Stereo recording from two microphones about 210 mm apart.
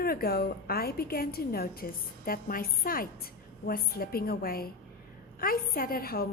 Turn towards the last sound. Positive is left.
turn(degrees=45)  # may be behind; listen again after turning